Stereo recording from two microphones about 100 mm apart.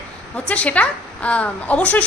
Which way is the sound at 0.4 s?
15° left (ahead or behind).